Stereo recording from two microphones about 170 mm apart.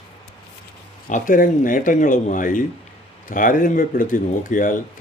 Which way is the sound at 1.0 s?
50° left (ahead or behind).